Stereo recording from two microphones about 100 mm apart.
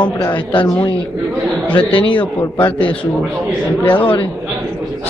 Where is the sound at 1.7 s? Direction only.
55° left (ahead or behind).